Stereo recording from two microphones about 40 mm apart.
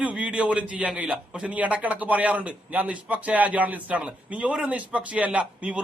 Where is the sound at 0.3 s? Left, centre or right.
Right.